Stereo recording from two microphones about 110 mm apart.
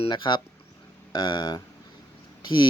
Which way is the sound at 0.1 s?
45° left (ahead or behind).